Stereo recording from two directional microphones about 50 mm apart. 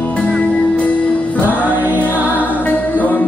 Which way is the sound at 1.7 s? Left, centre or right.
Right.